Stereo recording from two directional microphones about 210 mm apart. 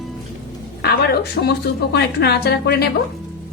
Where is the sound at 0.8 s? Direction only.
50° left (ahead or behind).